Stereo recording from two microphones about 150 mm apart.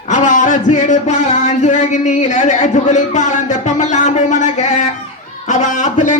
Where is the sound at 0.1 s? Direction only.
55° left (ahead or behind).